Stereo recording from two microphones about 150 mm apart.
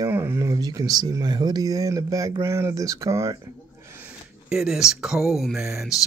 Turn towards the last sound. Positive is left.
turn(degrees=0)  # may be behind; listen again after turning